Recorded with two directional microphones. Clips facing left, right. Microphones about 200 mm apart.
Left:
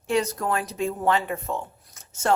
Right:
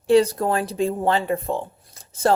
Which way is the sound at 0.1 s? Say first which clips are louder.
Right 7 dB; 30° right (ahead or behind).